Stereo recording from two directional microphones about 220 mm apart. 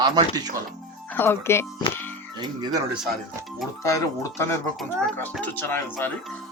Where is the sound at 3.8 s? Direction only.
15° left (ahead or behind).